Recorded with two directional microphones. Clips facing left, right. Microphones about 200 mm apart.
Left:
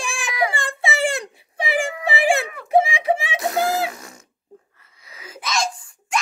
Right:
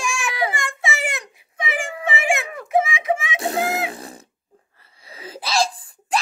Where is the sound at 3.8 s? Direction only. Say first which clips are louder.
Right 1 dB; 30° right (ahead or behind).